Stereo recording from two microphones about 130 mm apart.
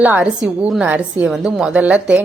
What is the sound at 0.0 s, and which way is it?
A woman's voice, 10° right (ahead or behind).